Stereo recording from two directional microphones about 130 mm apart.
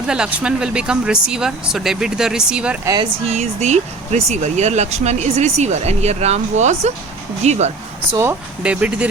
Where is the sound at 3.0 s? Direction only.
55° right (ahead or behind).